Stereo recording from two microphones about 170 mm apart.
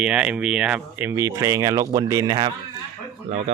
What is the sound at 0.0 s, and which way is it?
Speech, 5° right (ahead or behind).